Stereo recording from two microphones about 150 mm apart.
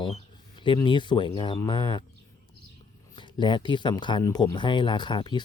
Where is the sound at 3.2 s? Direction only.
30° left (ahead or behind).